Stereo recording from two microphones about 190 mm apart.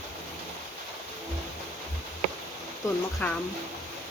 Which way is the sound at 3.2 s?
10° left (ahead or behind).